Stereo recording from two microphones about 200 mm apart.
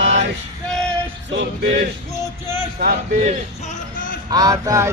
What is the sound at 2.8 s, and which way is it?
Speech, 35° right (ahead or behind).